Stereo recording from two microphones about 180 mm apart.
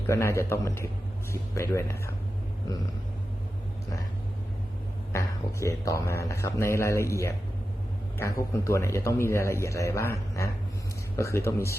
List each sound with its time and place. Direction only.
0.1 s a man's voice: 15° left (ahead or behind)
5.1 s a man's voice: 15° left (ahead or behind)